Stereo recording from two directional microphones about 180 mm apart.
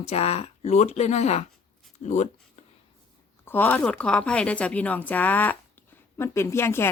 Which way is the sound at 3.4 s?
10° left (ahead or behind).